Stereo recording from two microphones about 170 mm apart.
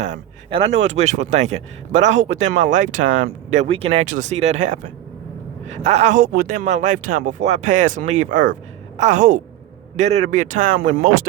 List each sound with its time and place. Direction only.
0.5 s speech: 35° right (ahead or behind)
2.2 s speech: 90° right
2.5 s speech: 45° right (ahead or behind)
6.7 s speech: 45° right (ahead or behind)